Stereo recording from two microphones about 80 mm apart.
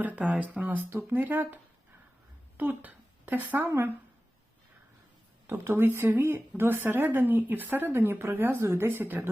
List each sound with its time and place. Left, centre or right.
0.0 s a woman's voice: centre
2.6 s speech: right
5.5 s a woman's voice: right